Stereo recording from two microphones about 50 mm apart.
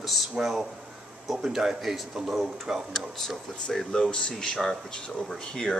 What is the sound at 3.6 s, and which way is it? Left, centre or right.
Speech, centre.